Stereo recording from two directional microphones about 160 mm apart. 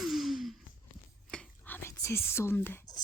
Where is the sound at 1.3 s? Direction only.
10° left (ahead or behind).